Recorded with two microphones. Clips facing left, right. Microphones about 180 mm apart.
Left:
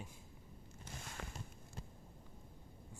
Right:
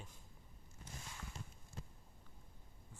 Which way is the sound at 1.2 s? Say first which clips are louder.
Left 7 dB; 75° left (ahead or behind).